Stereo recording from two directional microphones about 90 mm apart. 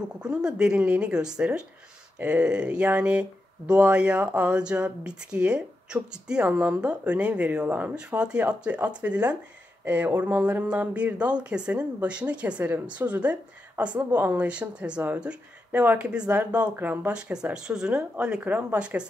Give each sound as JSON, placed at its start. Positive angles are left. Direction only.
{"t": 0.2, "sound": "speech", "side_deg": -10}
{"t": 17.3, "sound": "speech", "side_deg": -10}